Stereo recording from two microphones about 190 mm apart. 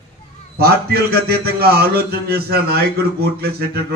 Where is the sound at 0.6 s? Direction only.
55° right (ahead or behind).